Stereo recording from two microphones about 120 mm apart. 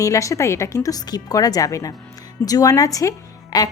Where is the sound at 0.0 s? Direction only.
25° left (ahead or behind).